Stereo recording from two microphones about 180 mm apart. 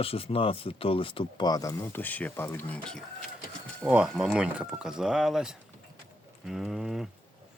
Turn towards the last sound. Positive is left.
turn(degrees=0)  # may be behind; listen again after turning